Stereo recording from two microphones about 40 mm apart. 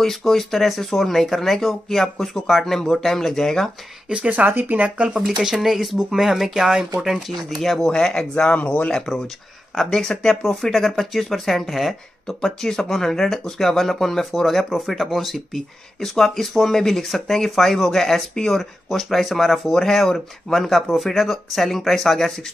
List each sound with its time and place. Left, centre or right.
0.2 s speech: centre
4.1 s speech: right
4.6 s speech: right
4.9 s speech: right
5.2 s speech: centre
7.9 s speech: centre
8.5 s speech: left
9.8 s speech: centre
12.4 s speech: centre